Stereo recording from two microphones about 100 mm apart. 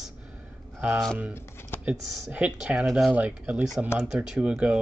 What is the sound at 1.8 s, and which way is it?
Speech, 15° right (ahead or behind).